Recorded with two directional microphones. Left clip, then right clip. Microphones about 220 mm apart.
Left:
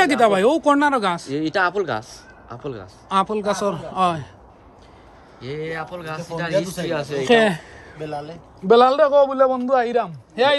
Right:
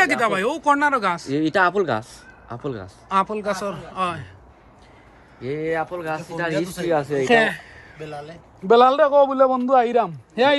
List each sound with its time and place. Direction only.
0.0 s speech: 15° left (ahead or behind)
1.3 s speech: 40° right (ahead or behind)
3.1 s speech: 10° left (ahead or behind)
5.5 s speech: 10° right (ahead or behind)
6.6 s speech: 20° right (ahead or behind)
7.4 s a man's voice: 30° left (ahead or behind)
8.6 s a man's voice: 5° left (ahead or behind)